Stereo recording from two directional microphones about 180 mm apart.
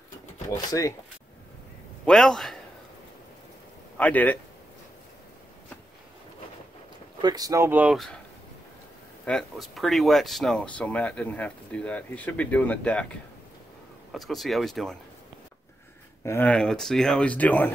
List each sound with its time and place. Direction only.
0.5 s speech: 20° left (ahead or behind)
2.0 s a man's voice: 5° left (ahead or behind)
4.0 s speech: 10° left (ahead or behind)
7.2 s speech: 20° right (ahead or behind); by 8.2 s centre (ahead or behind)
9.2 s speech: 5° left (ahead or behind)
14.1 s speech: centre (ahead or behind)
16.3 s speech: 10° left (ahead or behind)